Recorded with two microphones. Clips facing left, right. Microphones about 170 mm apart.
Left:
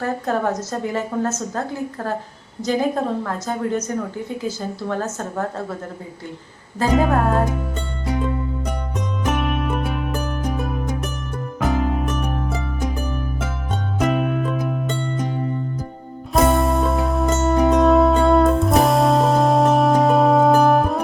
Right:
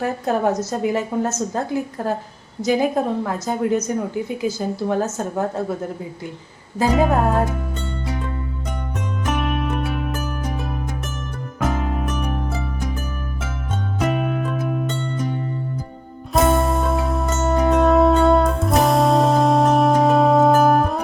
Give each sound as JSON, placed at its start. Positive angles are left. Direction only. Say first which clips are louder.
{"t": 0.0, "sound": "a woman's voice", "louder": "right 2 dB", "side_deg": -15}
{"t": 6.8, "sound": "a woman's voice", "louder": "right 1 dB", "side_deg": -10}
{"t": 9.2, "sound": "music", "louder": "left 1 dB", "side_deg": 0}
{"t": 11.6, "sound": "music", "louder": "left 2 dB", "side_deg": 0}
{"t": 14.0, "sound": "music", "louder": "left 2 dB", "side_deg": 0}
{"t": 16.3, "sound": "music", "louder": "even", "side_deg": 0}